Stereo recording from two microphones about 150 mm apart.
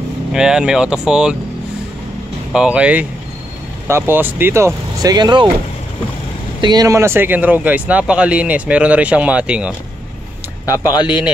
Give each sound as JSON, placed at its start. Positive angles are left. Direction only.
{"t": 0.3, "sound": "speech", "side_deg": -5}
{"t": 2.5, "sound": "speech", "side_deg": -5}
{"t": 6.6, "sound": "speech", "side_deg": -25}
{"t": 10.6, "sound": "speech", "side_deg": 25}